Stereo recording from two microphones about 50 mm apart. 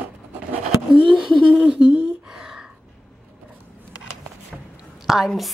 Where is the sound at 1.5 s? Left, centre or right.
Right.